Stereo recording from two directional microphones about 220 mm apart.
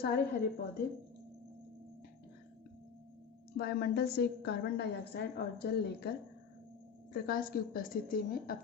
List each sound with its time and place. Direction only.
0.0 s a woman's voice: 45° left (ahead or behind)
3.6 s a woman's voice: 45° left (ahead or behind)